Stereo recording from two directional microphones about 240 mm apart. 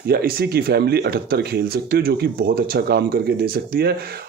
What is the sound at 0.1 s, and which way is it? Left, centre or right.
Speech, right.